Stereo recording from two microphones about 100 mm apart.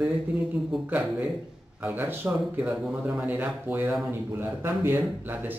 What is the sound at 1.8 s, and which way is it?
Speech, 20° right (ahead or behind).